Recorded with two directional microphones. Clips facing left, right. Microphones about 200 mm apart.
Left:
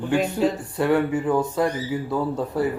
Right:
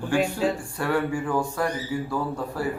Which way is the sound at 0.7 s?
20° left (ahead or behind).